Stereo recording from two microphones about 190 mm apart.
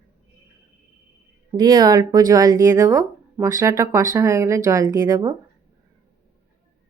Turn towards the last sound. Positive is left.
turn(degrees=-20)  # may be behind; listen again after turning